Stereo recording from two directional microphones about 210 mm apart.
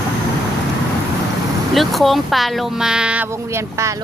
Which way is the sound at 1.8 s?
Centre (ahead or behind).